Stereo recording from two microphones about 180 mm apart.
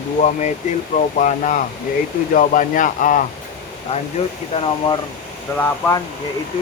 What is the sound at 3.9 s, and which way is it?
Speech, 35° left (ahead or behind).